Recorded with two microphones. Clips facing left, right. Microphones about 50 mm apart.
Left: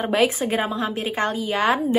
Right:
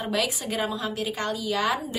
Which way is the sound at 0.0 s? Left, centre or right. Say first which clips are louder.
Left 7 dB; left.